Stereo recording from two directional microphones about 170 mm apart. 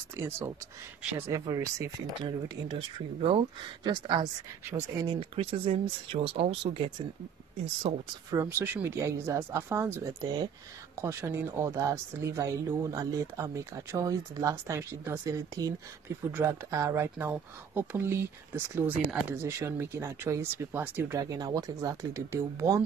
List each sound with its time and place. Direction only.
0.1 s speech: 15° right (ahead or behind); by 8.0 s 35° right (ahead or behind)
8.3 s speech: 15° right (ahead or behind)